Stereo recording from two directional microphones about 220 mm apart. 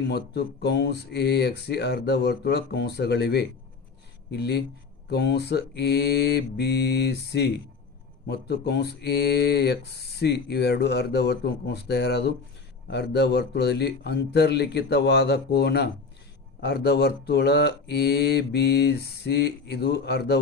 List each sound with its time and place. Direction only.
0.1 s speech: 50° left (ahead or behind)